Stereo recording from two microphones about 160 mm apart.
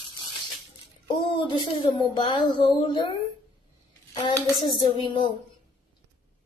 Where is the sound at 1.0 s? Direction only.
30° left (ahead or behind).